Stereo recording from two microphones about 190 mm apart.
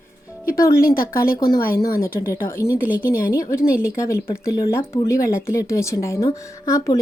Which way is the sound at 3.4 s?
15° left (ahead or behind).